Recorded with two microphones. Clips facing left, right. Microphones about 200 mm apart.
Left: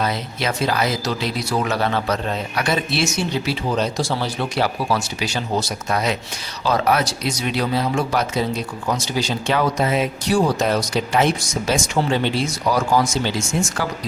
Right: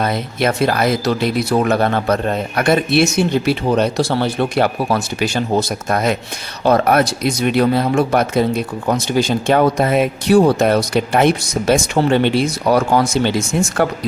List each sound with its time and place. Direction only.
0.0 s speech: 55° right (ahead or behind)